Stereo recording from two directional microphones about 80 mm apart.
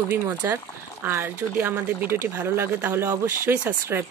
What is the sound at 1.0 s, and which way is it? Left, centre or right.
Speech, right.